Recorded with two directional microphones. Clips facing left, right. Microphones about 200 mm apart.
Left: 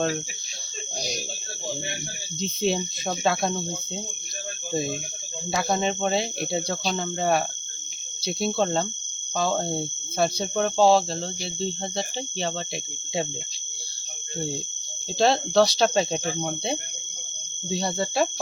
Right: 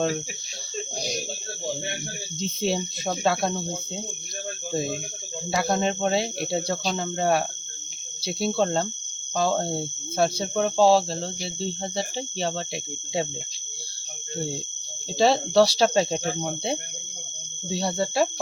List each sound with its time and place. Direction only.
2.4 s speech: 5° right (ahead or behind)
5.5 s speech: 5° right (ahead or behind)
15.2 s speech: 5° right (ahead or behind)
17.7 s speech: 5° right (ahead or behind)